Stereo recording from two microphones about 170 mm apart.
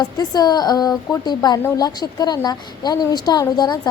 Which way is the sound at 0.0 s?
25° left (ahead or behind).